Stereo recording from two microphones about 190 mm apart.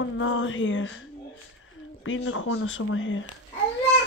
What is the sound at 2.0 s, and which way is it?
Speech, 90° left.